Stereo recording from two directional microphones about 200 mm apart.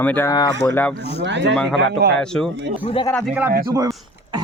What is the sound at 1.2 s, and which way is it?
Speech, 65° right (ahead or behind).